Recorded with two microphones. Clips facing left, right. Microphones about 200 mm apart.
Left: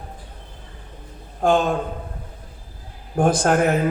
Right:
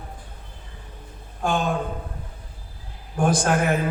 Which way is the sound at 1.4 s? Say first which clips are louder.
Left 6 dB; 50° left (ahead or behind).